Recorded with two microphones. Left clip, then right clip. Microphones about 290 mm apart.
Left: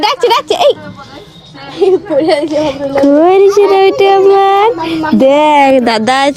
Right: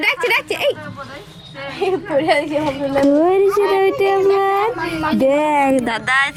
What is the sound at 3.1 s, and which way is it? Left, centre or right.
Speech, left.